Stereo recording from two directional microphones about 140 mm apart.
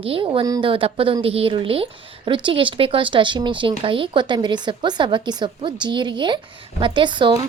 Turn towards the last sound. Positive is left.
turn(degrees=-35)  # may be behind; listen again after turning